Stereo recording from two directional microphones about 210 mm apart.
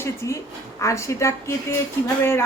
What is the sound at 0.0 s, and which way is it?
A woman's voice, 15° left (ahead or behind).